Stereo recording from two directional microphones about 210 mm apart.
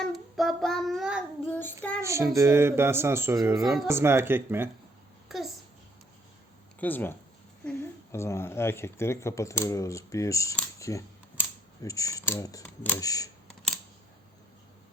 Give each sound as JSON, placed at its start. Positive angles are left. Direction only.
{"t": 0.0, "sound": "child singing", "side_deg": 0}
{"t": 1.5, "sound": "child singing", "side_deg": 10}
{"t": 2.0, "sound": "speech", "side_deg": -15}
{"t": 3.6, "sound": "speech", "side_deg": 0}
{"t": 3.8, "sound": "speech", "side_deg": -10}
{"t": 6.7, "sound": "speech", "side_deg": 10}